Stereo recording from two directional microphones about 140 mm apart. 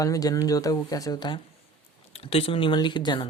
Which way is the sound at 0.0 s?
25° left (ahead or behind).